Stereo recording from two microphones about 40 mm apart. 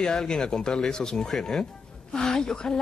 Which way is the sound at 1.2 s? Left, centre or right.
Centre.